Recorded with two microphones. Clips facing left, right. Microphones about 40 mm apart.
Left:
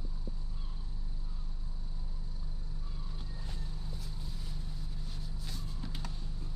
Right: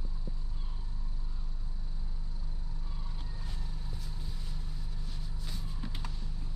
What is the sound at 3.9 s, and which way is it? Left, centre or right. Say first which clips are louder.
Vehicle: even; centre.